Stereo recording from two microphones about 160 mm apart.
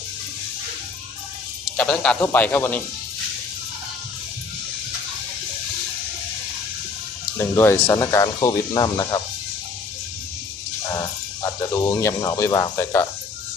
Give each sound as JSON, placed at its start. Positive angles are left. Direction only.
{"t": 1.7, "sound": "a man's voice", "side_deg": 5}
{"t": 7.3, "sound": "speech", "side_deg": 15}
{"t": 11.9, "sound": "speech", "side_deg": 20}